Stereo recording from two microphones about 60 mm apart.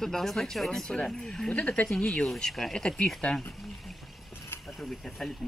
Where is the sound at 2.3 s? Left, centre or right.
Centre.